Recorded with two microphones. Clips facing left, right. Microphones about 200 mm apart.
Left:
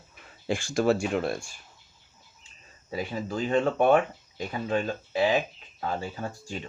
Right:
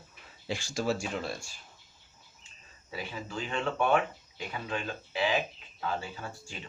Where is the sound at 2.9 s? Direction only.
40° left (ahead or behind).